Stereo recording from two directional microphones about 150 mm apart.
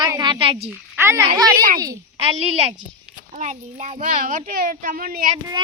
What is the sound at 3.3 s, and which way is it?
A child's voice, 55° right (ahead or behind).